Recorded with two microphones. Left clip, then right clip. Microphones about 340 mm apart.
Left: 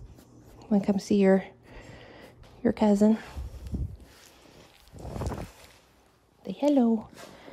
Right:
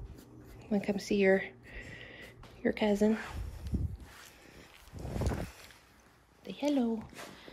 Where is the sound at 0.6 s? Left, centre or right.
Left.